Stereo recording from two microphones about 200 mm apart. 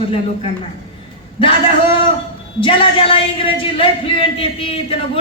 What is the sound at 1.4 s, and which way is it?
A man's voice, 25° left (ahead or behind).